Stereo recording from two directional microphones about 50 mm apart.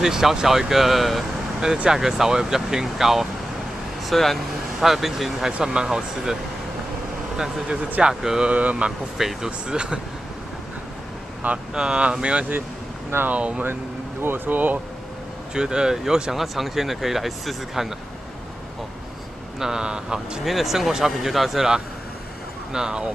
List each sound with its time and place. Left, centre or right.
0.0 s speech: centre
7.3 s speech: centre
8.5 s speech: right
9.2 s speech: centre
11.5 s speech: centre
14.2 s speech: right
15.5 s speech: centre
19.6 s speech: centre
20.4 s speech: centre